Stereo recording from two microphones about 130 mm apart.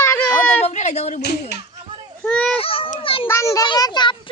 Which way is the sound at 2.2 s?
10° left (ahead or behind).